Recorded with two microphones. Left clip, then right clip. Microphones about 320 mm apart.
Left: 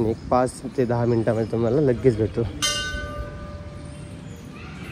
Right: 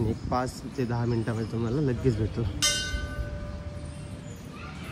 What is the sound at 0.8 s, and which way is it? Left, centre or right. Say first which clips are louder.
Speech: left 9 dB; left.